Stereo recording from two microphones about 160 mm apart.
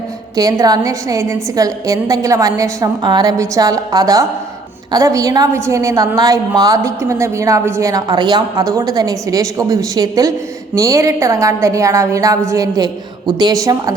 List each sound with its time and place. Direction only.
0.3 s a woman's voice: 20° right (ahead or behind)